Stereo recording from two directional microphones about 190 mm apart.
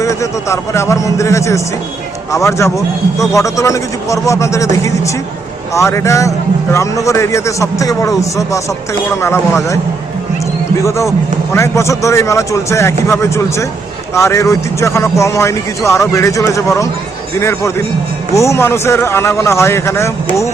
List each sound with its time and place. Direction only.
0.0 s speech: 15° left (ahead or behind)
10.8 s speech: 15° left (ahead or behind)